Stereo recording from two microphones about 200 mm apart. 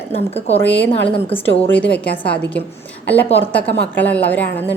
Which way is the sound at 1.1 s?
25° left (ahead or behind).